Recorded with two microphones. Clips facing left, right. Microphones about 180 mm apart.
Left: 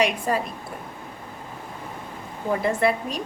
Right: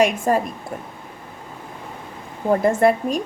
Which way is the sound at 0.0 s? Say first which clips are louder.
Right 5 dB; 45° right (ahead or behind).